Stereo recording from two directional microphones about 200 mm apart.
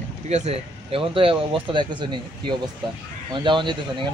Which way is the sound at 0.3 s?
30° right (ahead or behind).